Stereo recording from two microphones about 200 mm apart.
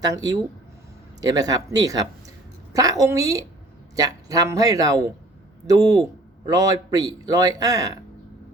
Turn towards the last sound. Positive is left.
turn(degrees=-15)  # may be behind; listen again after turning